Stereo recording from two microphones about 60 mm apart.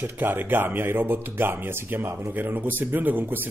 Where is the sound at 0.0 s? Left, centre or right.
Right.